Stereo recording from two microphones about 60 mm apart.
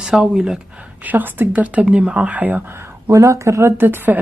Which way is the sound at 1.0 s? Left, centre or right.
Right.